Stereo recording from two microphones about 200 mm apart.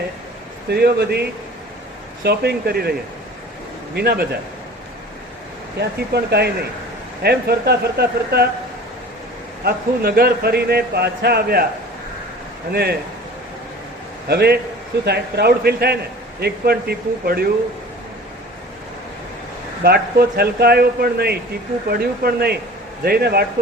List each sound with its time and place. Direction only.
0.7 s a man's voice: 55° right (ahead or behind)
3.9 s a man's voice: 50° right (ahead or behind)
5.8 s a man's voice: 55° right (ahead or behind)
9.6 s a man's voice: 50° right (ahead or behind)
12.7 s a man's voice: 50° right (ahead or behind)
14.3 s a man's voice: 55° right (ahead or behind)
19.8 s a man's voice: 50° right (ahead or behind)